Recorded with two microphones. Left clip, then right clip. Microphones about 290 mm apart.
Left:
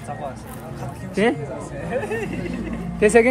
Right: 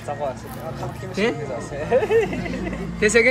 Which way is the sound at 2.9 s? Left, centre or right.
Centre.